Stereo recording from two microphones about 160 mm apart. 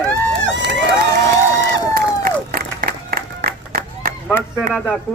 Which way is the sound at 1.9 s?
70° right (ahead or behind).